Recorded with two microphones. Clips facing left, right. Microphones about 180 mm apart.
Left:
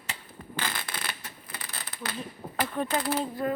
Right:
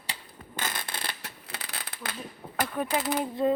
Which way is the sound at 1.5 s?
70° right (ahead or behind).